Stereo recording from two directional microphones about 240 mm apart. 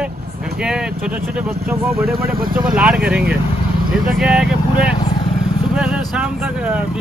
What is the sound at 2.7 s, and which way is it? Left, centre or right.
Speech, centre.